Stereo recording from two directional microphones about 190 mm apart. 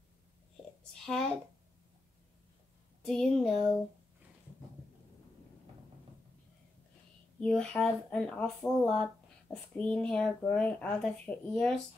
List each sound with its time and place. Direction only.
1.0 s a sound: 5° left (ahead or behind)
3.1 s speech: 5° left (ahead or behind)
7.3 s speech: 5° left (ahead or behind)